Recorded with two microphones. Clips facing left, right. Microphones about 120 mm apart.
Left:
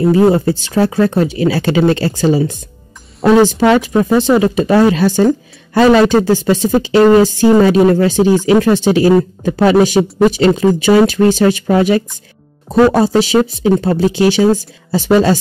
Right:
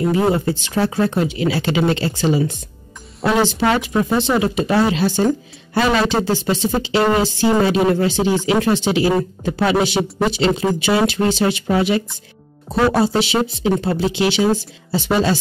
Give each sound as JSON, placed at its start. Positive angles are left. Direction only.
{"t": 0.0, "sound": "speech", "side_deg": 35}